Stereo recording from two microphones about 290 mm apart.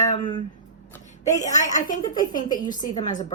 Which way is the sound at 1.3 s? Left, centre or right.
Left.